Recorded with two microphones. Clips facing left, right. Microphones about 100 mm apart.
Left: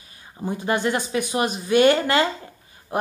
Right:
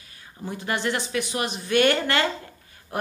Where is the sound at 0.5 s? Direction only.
20° left (ahead or behind).